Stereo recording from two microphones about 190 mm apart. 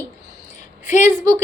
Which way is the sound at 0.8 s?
40° left (ahead or behind).